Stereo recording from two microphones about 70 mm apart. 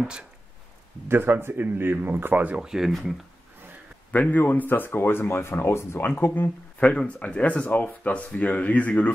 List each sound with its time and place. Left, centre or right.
1.0 s speech: right
2.6 s speech: centre
4.1 s speech: left
6.8 s speech: centre